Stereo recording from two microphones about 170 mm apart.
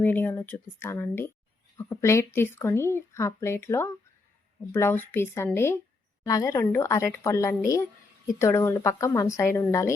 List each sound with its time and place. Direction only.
0.0 s speech: 10° left (ahead or behind)